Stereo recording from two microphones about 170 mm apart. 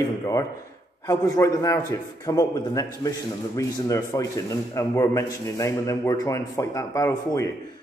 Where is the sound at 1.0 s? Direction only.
20° left (ahead or behind).